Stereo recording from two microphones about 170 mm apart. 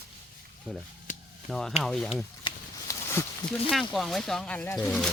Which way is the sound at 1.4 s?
Centre (ahead or behind).